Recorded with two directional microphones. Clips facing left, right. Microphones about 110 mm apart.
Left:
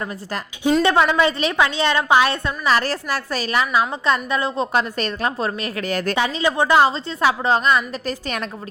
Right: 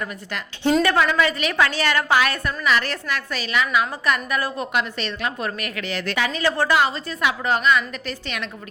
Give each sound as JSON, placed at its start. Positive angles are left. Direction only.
{"t": 0.8, "sound": "a woman's voice", "side_deg": 25}
{"t": 5.4, "sound": "a woman's voice", "side_deg": 30}
{"t": 5.8, "sound": "speech", "side_deg": 45}
{"t": 6.1, "sound": "a woman's voice", "side_deg": 30}
{"t": 6.4, "sound": "a woman's voice", "side_deg": 15}
{"t": 6.7, "sound": "a woman's voice", "side_deg": 30}